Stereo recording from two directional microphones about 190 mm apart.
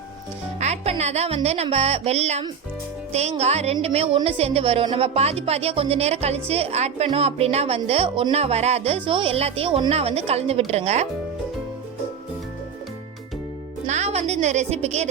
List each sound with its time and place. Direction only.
0.6 s speech: 35° right (ahead or behind)
13.8 s a woman's voice: 35° right (ahead or behind)